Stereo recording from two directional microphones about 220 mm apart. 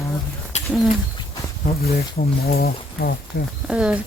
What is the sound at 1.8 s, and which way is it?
Speech, 40° left (ahead or behind).